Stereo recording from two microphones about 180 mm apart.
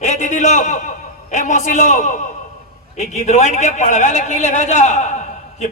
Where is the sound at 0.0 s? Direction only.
40° left (ahead or behind).